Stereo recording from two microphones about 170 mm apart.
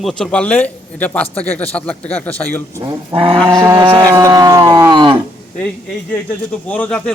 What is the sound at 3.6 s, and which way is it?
Livestock, 15° right (ahead or behind).